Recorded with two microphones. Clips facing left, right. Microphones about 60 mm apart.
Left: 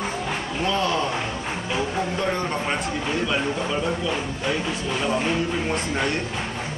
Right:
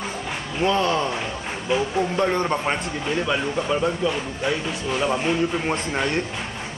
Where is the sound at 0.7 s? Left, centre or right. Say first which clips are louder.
Right 3 dB; right.